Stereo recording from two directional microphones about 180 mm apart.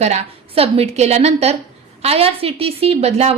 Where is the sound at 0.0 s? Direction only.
35° right (ahead or behind).